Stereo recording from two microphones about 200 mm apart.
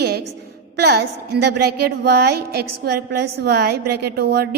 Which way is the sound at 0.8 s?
55° right (ahead or behind).